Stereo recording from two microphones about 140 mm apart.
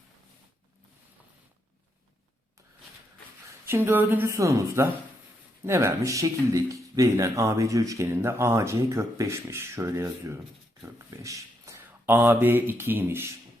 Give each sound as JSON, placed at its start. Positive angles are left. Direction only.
{"t": 3.7, "sound": "a woman's voice", "side_deg": -15}